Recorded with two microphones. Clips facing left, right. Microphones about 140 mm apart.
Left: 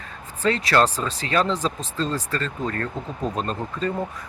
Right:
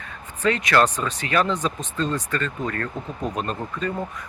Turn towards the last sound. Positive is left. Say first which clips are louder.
# left 1 dB
turn(degrees=30)  # may be behind; listen again after turning